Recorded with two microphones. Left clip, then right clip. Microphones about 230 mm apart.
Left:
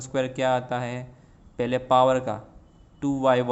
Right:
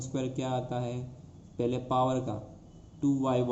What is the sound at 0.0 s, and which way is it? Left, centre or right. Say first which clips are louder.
A man's voice: left 10 dB; left.